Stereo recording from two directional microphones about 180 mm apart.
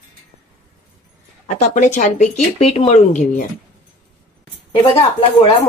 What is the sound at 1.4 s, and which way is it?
A woman's voice, 40° left (ahead or behind).